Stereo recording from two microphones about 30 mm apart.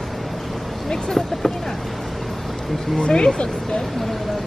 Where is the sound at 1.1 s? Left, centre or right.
Centre.